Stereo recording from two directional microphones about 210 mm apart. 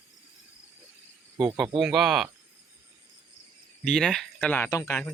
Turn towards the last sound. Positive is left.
turn(degrees=10)  # may be behind; listen again after turning